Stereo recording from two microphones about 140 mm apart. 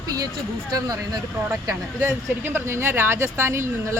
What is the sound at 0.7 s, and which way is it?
Speech, 25° right (ahead or behind).